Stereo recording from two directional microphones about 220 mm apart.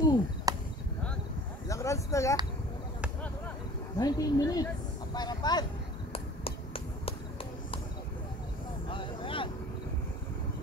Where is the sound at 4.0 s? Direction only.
15° left (ahead or behind).